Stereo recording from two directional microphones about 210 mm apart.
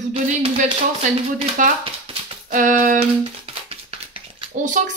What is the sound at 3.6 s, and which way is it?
Dog, 25° right (ahead or behind).